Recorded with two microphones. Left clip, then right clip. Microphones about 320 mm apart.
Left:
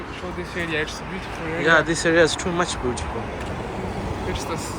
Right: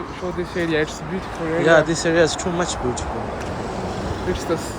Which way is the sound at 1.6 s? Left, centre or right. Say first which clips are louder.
Right 2 dB; centre.